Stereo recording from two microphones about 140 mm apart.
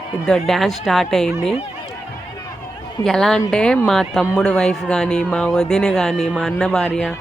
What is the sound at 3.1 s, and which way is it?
Speech, 5° left (ahead or behind).